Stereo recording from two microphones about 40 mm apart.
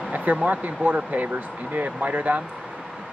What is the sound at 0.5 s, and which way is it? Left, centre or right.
Speech, right.